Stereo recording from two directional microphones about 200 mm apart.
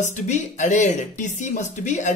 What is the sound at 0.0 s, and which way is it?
Speech, 35° left (ahead or behind).